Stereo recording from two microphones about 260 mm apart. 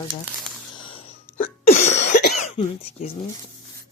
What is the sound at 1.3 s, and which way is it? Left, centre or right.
Cough, left.